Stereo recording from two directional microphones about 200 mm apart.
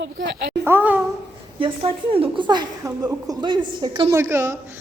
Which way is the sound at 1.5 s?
25° right (ahead or behind).